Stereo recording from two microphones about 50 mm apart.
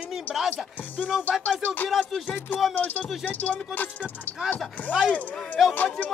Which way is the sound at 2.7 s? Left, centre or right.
Left.